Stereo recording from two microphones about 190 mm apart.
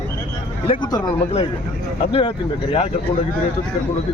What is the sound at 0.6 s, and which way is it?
A man's voice, 25° left (ahead or behind).